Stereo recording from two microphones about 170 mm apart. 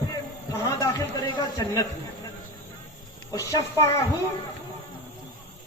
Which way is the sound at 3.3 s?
20° left (ahead or behind).